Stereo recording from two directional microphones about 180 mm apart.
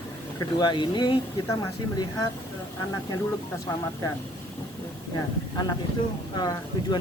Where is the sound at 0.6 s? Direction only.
25° left (ahead or behind).